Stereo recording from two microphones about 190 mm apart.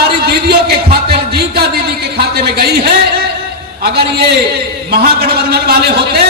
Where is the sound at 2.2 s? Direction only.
55° right (ahead or behind).